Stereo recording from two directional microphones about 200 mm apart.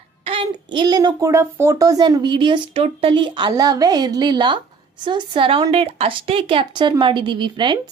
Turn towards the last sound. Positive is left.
turn(degrees=-25)  # may be behind; listen again after turning